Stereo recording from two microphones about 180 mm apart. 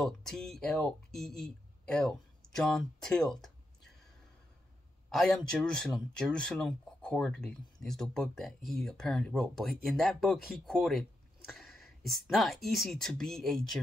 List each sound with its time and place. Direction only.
0.0 s speech: centre (ahead or behind)
5.1 s speech: 5° left (ahead or behind)
11.5 s a sound: centre (ahead or behind)
12.3 s speech: centre (ahead or behind)